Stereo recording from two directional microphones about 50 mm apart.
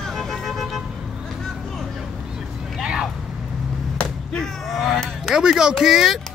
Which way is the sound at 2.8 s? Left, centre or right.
Centre.